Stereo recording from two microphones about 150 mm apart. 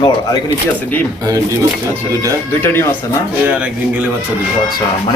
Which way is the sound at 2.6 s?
15° left (ahead or behind).